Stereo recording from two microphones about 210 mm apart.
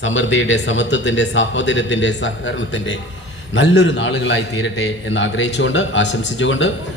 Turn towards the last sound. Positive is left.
turn(degrees=60)  # may be behind; listen again after turning